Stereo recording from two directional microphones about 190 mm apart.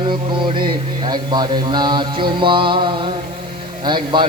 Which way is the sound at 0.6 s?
20° right (ahead or behind).